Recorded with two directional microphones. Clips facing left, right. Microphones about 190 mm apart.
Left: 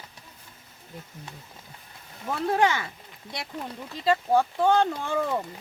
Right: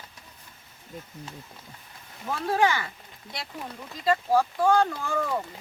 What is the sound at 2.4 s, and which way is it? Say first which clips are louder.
Speech: left 1 dB; 20° left (ahead or behind).